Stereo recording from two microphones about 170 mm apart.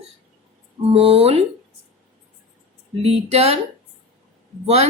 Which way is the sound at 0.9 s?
35° right (ahead or behind).